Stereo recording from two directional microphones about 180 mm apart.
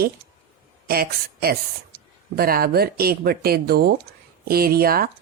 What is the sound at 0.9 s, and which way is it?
Speech, 55° right (ahead or behind).